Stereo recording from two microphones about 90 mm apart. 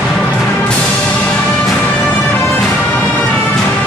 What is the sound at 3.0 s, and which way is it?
Music, 15° left (ahead or behind).